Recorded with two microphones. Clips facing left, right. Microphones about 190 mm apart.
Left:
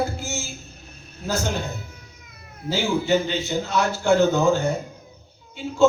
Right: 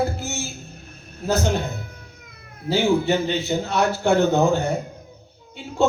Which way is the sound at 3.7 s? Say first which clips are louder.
Even; 60° right (ahead or behind).